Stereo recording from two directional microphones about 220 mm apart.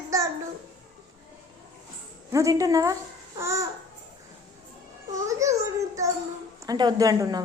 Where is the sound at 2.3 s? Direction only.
15° right (ahead or behind).